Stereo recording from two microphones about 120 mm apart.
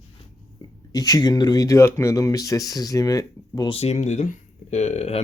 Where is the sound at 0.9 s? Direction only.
30° left (ahead or behind).